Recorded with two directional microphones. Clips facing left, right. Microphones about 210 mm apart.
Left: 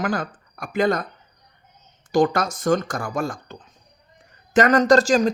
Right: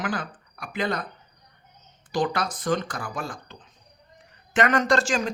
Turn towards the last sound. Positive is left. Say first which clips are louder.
# left 7 dB
turn(degrees=40)  # may be behind; listen again after turning